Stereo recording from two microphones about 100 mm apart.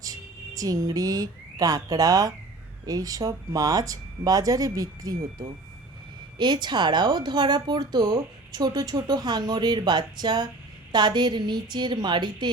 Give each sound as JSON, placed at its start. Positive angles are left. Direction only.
{"t": 0.0, "sound": "speech", "side_deg": -35}